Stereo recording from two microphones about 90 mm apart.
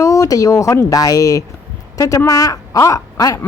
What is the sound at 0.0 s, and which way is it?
Speech, 35° left (ahead or behind).